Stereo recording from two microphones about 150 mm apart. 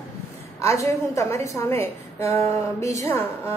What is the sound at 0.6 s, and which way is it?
A woman's voice, 20° left (ahead or behind).